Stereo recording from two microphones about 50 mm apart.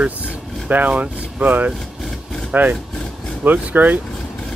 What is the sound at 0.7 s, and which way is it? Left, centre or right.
Speech, right.